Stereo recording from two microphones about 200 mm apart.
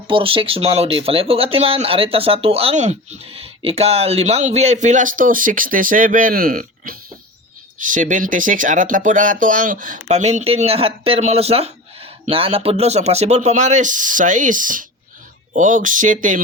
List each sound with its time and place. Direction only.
0.1 s speech: 25° right (ahead or behind)